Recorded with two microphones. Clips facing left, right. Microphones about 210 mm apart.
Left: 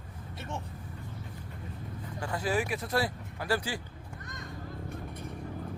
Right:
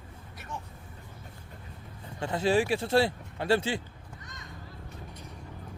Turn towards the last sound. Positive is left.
turn(degrees=55)  # may be behind; listen again after turning